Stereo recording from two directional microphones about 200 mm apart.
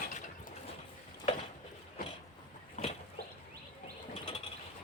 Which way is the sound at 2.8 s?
35° left (ahead or behind).